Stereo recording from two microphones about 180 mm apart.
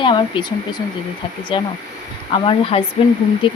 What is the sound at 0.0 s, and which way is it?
Speech, 25° left (ahead or behind).